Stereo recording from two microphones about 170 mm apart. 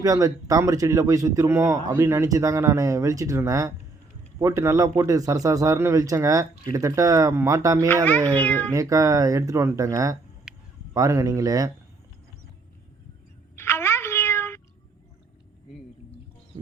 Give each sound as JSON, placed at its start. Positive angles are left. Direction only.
{"t": 0.0, "sound": "a man's voice", "side_deg": -20}
{"t": 8.0, "sound": "speech", "side_deg": 10}
{"t": 8.7, "sound": "a man's voice", "side_deg": -20}
{"t": 13.6, "sound": "a sound", "side_deg": 15}